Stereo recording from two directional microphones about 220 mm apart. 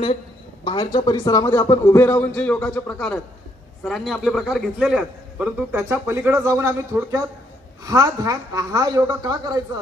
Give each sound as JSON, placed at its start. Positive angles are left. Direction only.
{"t": 0.7, "sound": "a man's voice", "side_deg": 20}